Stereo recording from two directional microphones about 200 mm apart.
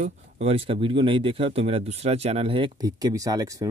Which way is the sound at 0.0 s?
30° right (ahead or behind).